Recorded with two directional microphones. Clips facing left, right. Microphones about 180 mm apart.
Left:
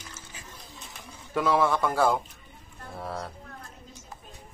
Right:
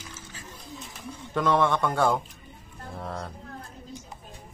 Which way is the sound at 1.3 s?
5° left (ahead or behind).